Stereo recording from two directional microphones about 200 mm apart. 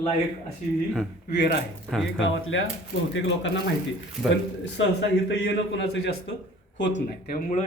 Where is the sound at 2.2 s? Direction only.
75° left (ahead or behind).